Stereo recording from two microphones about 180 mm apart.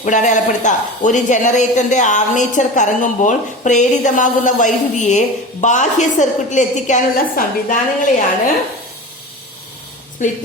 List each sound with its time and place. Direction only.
0.0 s speech: 45° left (ahead or behind)